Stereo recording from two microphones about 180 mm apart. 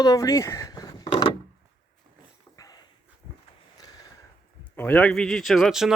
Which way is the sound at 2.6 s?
20° left (ahead or behind).